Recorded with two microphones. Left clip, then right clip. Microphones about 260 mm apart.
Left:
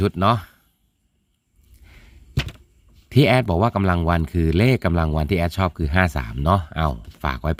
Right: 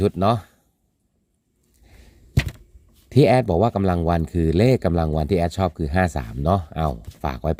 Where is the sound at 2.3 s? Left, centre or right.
Centre.